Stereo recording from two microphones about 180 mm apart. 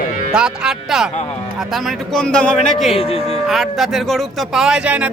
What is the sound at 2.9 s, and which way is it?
Speech, 35° left (ahead or behind).